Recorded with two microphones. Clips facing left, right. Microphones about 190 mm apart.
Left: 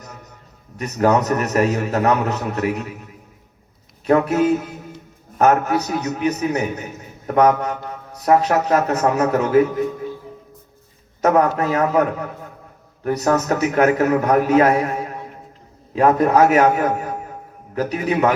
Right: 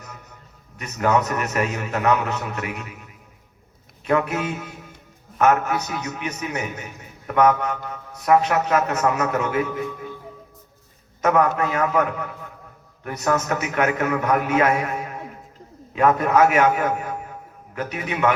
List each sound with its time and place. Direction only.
0.8 s a man's voice: 35° left (ahead or behind)
4.0 s a man's voice: 35° left (ahead or behind)
11.2 s a man's voice: 35° left (ahead or behind)